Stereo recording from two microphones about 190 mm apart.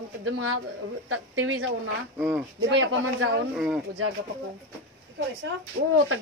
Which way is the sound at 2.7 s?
90° right.